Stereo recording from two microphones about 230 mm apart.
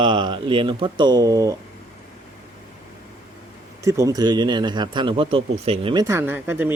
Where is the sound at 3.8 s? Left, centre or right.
Centre.